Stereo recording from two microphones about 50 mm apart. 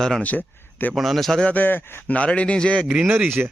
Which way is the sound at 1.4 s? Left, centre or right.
Left.